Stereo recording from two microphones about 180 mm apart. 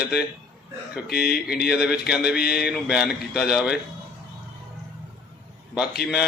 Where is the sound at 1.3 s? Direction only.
60° left (ahead or behind).